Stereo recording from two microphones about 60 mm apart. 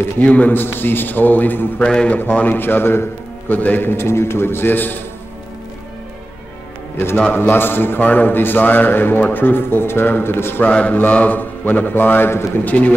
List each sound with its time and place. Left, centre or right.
0.2 s a man's voice: left
1.8 s speech: centre
2.1 s a man's voice: left
3.9 s a man's voice: left
7.3 s a man's voice: left
10.6 s mantra: left
11.0 s a man's voice: left
12.6 s mantra: left